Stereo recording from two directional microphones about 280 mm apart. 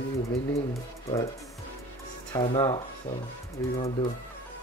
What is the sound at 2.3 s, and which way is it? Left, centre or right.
Speech, centre.